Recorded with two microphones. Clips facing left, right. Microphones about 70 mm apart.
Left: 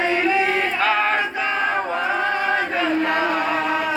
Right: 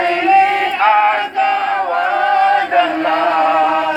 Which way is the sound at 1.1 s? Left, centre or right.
Centre.